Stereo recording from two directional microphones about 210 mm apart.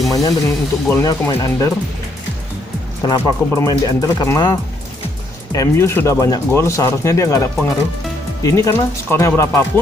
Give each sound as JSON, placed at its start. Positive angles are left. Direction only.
{"t": 0.1, "sound": "a sound", "side_deg": 15}
{"t": 0.9, "sound": "speech", "side_deg": 10}
{"t": 3.1, "sound": "speech", "side_deg": 15}
{"t": 5.5, "sound": "speech", "side_deg": 10}